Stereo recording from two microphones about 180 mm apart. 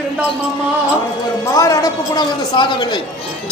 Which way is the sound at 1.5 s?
20° left (ahead or behind).